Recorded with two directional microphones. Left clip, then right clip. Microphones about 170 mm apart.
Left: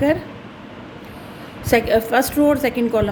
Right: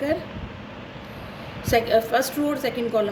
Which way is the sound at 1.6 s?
55° left (ahead or behind).